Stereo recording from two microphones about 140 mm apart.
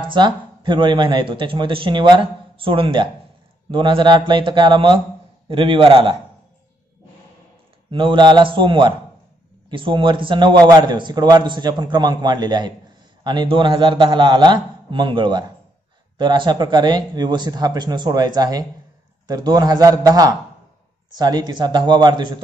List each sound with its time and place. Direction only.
0.1 s a man's voice: 35° right (ahead or behind)
7.9 s a man's voice: 35° right (ahead or behind)